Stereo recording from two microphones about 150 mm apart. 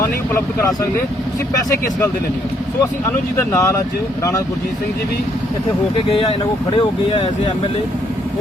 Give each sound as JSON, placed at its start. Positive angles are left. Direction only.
{"t": 3.3, "sound": "speech", "side_deg": 20}
{"t": 6.1, "sound": "speech", "side_deg": 35}